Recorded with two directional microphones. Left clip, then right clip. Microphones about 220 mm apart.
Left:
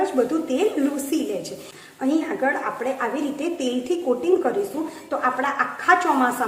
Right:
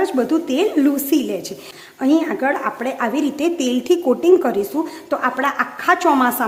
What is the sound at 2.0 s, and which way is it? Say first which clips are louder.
A woman's voice: right 5 dB; 45° right (ahead or behind).